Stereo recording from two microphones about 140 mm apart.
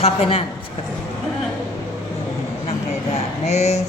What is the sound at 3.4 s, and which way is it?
Speech, 50° left (ahead or behind).